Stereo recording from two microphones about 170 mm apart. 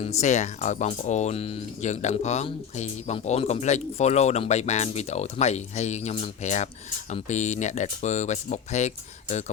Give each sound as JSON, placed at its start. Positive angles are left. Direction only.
{"t": 0.2, "sound": "speech", "side_deg": 45}